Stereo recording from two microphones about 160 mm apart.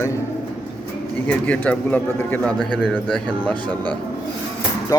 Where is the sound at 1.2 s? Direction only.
10° left (ahead or behind).